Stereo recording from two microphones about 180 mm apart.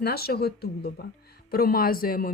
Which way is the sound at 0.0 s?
60° left (ahead or behind).